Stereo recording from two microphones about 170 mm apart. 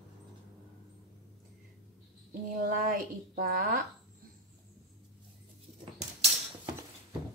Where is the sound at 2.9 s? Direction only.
50° right (ahead or behind).